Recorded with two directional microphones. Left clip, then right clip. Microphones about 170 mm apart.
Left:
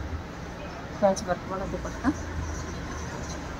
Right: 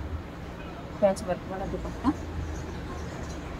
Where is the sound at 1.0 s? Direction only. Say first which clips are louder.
Left 1 dB; centre (ahead or behind).